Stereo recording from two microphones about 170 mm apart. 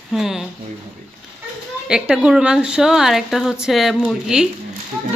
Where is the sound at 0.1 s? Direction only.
Centre (ahead or behind).